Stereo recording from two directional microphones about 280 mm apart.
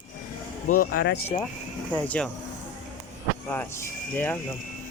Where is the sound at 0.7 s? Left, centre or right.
Left.